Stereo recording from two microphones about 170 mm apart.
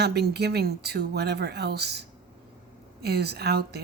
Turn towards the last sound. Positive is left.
turn(degrees=-75)  # may be behind; listen again after turning